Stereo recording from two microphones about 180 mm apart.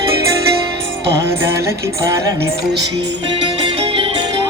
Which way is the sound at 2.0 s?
15° right (ahead or behind).